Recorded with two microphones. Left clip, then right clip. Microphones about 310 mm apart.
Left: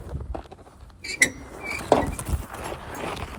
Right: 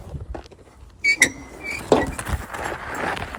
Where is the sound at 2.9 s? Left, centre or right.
Right.